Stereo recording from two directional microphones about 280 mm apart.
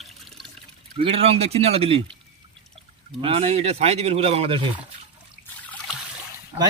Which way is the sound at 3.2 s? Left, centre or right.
Centre.